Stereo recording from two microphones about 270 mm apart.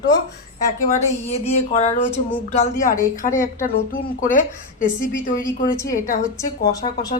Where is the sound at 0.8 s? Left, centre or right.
Left.